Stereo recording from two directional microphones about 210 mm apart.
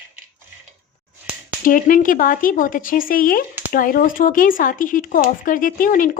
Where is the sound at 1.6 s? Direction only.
40° left (ahead or behind).